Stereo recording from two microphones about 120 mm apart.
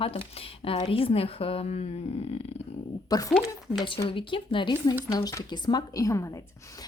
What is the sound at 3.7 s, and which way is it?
A woman's voice, 45° left (ahead or behind).